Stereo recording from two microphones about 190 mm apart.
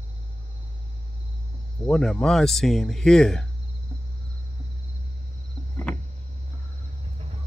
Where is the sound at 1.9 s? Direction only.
5° left (ahead or behind).